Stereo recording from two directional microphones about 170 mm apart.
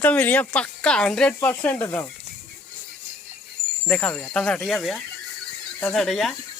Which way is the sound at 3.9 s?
10° left (ahead or behind).